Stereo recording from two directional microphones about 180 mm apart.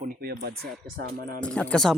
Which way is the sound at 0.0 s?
55° right (ahead or behind).